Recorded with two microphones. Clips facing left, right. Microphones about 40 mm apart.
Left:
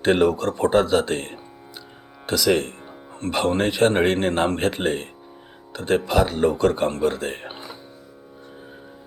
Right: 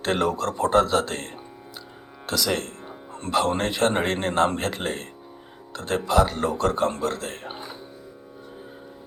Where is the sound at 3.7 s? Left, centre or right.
Centre.